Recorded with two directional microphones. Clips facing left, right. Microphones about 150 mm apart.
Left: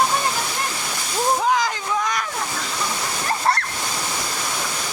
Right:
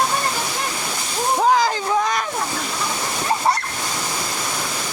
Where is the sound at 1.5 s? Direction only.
30° right (ahead or behind).